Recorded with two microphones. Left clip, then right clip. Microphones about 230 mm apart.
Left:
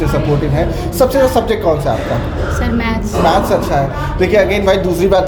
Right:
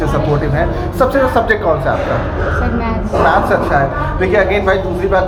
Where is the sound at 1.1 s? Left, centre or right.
Left.